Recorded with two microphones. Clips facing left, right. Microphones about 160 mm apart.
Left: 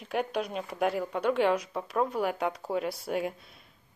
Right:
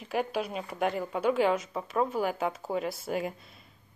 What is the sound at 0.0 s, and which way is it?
Speech, centre (ahead or behind).